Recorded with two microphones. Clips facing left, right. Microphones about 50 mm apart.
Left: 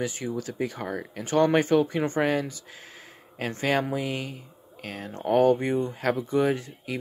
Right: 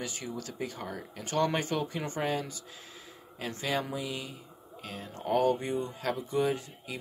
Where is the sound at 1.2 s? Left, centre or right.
Left.